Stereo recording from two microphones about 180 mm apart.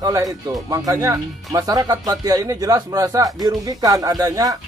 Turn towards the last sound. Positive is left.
turn(degrees=-20)  # may be behind; listen again after turning